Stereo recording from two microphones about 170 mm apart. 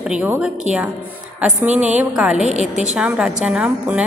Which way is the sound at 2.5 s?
40° right (ahead or behind).